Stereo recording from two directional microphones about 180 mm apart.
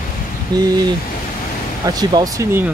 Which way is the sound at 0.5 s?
25° right (ahead or behind).